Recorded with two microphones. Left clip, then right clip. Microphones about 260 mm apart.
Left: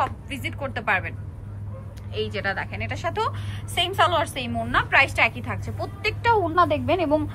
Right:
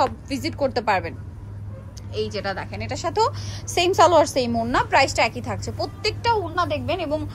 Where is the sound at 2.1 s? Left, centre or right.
Centre.